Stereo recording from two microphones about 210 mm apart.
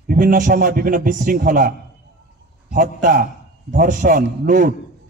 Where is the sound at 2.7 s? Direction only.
40° right (ahead or behind).